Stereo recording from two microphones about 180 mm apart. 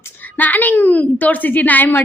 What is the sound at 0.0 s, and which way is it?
A woman's voice, 10° left (ahead or behind).